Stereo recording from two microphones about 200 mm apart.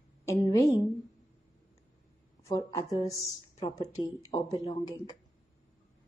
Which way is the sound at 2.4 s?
15° left (ahead or behind).